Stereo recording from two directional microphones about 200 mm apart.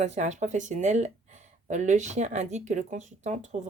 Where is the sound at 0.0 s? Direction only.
35° right (ahead or behind).